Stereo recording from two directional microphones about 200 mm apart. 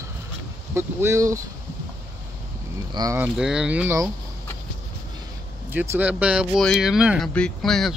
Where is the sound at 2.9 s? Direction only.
15° right (ahead or behind).